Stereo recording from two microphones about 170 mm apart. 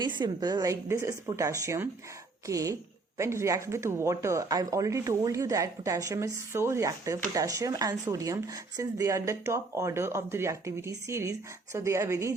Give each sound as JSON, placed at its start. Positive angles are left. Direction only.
{"t": 0.0, "sound": "speech", "side_deg": -25}